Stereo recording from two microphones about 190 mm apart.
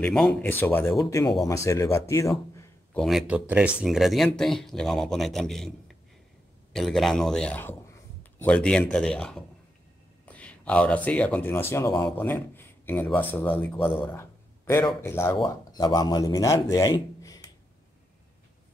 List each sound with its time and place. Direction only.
0.0 s a man's voice: 5° left (ahead or behind)
3.0 s speech: centre (ahead or behind)
6.7 s speech: centre (ahead or behind)
13.7 s speech: 30° left (ahead or behind)
15.0 s a man's voice: 15° left (ahead or behind)